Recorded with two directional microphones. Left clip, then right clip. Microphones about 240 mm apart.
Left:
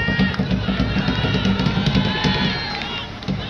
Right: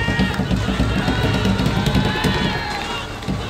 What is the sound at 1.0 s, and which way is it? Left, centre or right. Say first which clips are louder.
Music: right 2 dB; right.